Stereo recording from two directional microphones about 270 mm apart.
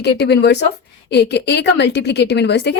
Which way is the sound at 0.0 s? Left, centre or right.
Left.